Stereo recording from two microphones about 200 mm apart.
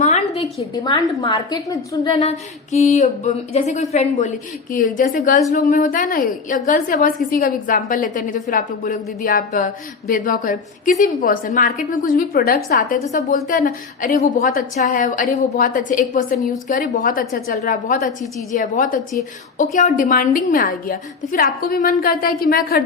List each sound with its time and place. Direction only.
0.0 s a sound: 35° left (ahead or behind)
1.2 s a woman's voice: 20° left (ahead or behind)
2.7 s a woman's voice: 35° left (ahead or behind)
13.1 s a woman's voice: 40° left (ahead or behind)